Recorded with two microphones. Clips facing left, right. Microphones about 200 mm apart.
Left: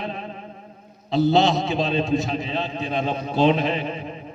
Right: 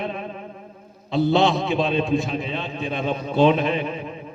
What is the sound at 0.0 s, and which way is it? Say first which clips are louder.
Music: right 2 dB; 55° right (ahead or behind).